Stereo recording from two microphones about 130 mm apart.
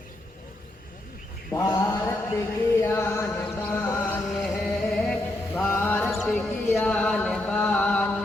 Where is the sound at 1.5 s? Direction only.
25° left (ahead or behind).